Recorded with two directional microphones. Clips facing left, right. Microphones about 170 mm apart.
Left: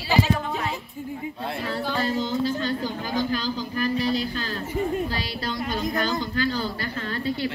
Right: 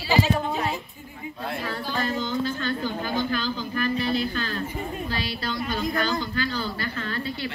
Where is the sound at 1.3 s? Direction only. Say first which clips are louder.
Right 1 dB; 30° left (ahead or behind).